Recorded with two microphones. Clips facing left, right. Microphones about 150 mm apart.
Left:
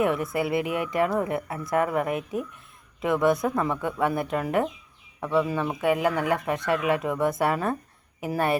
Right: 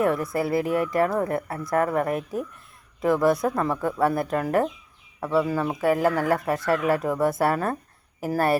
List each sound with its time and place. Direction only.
0.0 s speech: centre (ahead or behind)